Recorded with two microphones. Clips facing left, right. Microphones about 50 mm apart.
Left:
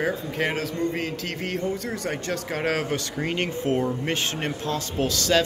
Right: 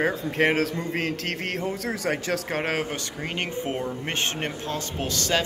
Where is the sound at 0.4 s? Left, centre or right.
Right.